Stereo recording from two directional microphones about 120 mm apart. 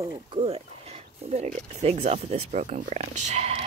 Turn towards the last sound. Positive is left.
turn(degrees=-65)  # may be behind; listen again after turning